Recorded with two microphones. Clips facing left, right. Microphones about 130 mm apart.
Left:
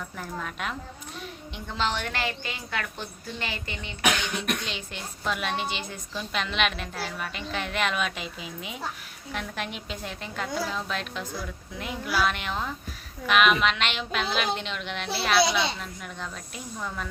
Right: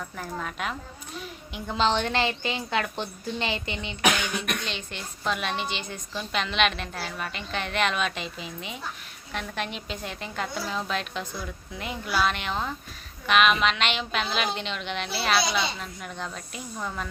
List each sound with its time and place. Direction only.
0.2 s a woman's voice: centre (ahead or behind)
1.2 s a sound: 5° right (ahead or behind)
1.7 s a woman's voice: 25° right (ahead or behind)
4.2 s a woman's voice: 5° right (ahead or behind)